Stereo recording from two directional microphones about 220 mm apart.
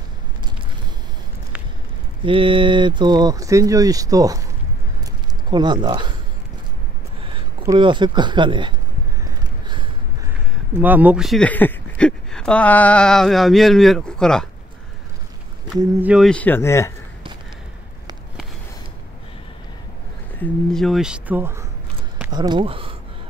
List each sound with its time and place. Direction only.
2.2 s speech: 25° right (ahead or behind)
5.5 s speech: 20° right (ahead or behind)
7.6 s speech: 20° right (ahead or behind)
9.2 s a sound: 20° right (ahead or behind)
10.8 s speech: 5° right (ahead or behind)
15.8 s speech: 5° right (ahead or behind); by 16.9 s 10° left (ahead or behind)
20.3 s speech: 5° left (ahead or behind); by 22.9 s 25° right (ahead or behind)